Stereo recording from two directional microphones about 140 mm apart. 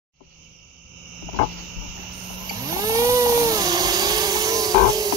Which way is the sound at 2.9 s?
25° right (ahead or behind).